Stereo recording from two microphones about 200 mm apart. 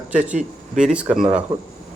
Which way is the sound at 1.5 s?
25° right (ahead or behind).